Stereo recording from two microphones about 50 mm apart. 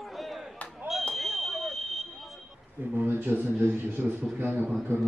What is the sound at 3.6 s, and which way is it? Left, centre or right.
A man's voice, right.